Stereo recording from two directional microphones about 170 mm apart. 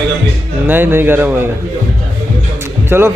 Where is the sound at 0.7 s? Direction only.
10° right (ahead or behind).